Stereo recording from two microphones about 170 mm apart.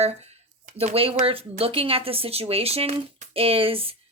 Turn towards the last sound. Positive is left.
turn(degrees=-35)  # may be behind; listen again after turning